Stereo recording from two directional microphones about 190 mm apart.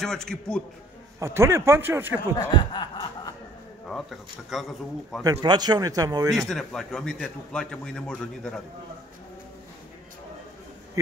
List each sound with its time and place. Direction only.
0.0 s a man's voice: 5° left (ahead or behind)
1.2 s speech: 15° right (ahead or behind)
2.3 s snicker: 20° left (ahead or behind)
3.9 s a man's voice: centre (ahead or behind)
5.2 s speech: 20° right (ahead or behind)
6.3 s a man's voice: centre (ahead or behind)